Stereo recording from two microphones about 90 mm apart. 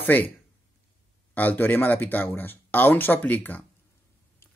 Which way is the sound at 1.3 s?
20° left (ahead or behind).